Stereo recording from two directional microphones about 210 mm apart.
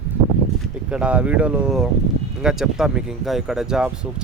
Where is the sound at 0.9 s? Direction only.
5° right (ahead or behind).